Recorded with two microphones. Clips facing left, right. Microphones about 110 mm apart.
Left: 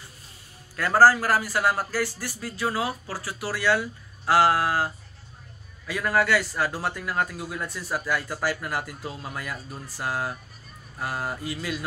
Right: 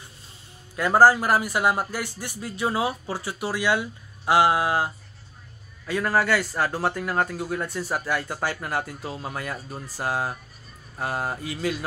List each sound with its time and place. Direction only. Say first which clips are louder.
0.7 s speech: right 1 dB; 20° right (ahead or behind)